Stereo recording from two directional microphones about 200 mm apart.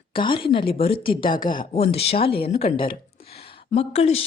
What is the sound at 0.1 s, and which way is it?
A woman's voice, 25° left (ahead or behind).